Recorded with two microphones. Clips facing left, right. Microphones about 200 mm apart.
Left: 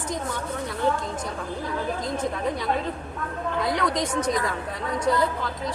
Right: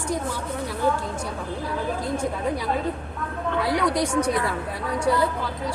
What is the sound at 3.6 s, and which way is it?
Speech, 10° right (ahead or behind).